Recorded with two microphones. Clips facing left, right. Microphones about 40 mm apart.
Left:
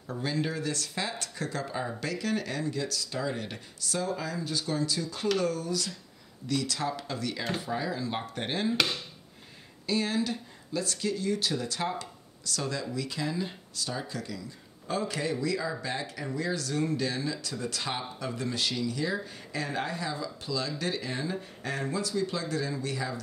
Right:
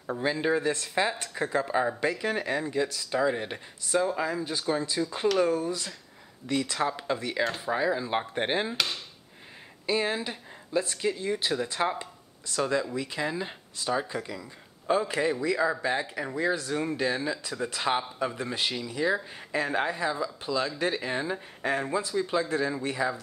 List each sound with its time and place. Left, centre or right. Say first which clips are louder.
0.0 s speech: right 4 dB; right
8.7 s speech: left 2 dB; centre
9.8 s speech: right 1 dB; right